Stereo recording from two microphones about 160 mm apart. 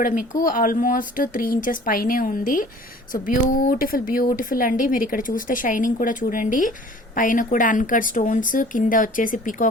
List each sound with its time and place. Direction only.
0.0 s a woman's voice: 60° left (ahead or behind)